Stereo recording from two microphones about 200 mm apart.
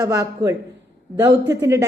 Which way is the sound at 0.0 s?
20° right (ahead or behind).